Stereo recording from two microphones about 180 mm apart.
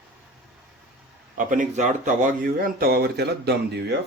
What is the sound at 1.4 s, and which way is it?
Speech, 45° right (ahead or behind).